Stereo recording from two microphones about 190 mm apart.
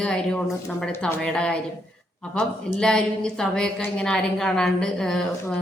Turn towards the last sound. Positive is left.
turn(degrees=0)  # may be behind; listen again after turning